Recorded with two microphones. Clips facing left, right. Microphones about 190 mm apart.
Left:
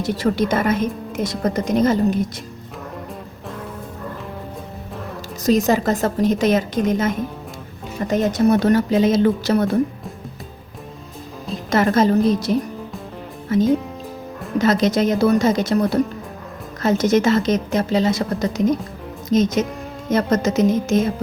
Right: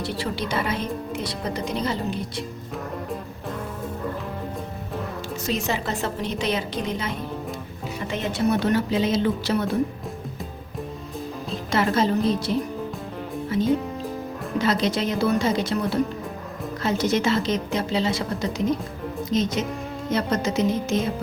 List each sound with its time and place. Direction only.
0.0 s speech: 45° left (ahead or behind)
5.6 s speech: 40° left (ahead or behind)
11.7 s speech: 45° left (ahead or behind)
13.5 s speech: 45° left (ahead or behind)